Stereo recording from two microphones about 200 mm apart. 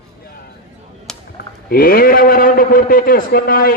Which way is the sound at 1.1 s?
5° left (ahead or behind).